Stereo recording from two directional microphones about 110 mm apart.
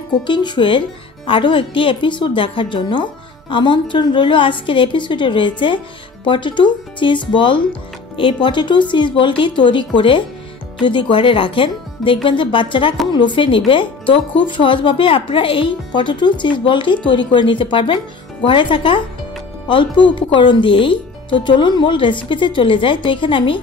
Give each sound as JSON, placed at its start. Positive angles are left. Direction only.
{"t": 0.3, "sound": "speech", "side_deg": 45}